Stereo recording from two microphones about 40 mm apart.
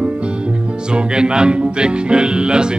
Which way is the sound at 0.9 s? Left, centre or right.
Right.